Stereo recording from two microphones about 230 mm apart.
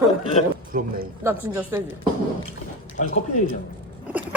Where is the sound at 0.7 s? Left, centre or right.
Right.